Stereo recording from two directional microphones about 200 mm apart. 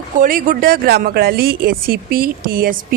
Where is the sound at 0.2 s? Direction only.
45° right (ahead or behind).